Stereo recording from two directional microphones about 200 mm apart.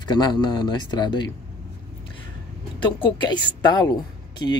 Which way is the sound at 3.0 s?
20° left (ahead or behind).